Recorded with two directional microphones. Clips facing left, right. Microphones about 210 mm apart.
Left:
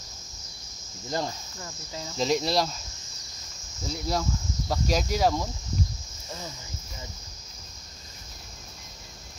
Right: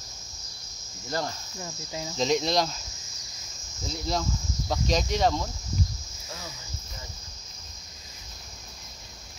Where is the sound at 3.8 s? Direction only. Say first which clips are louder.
Left 1 dB; 5° left (ahead or behind).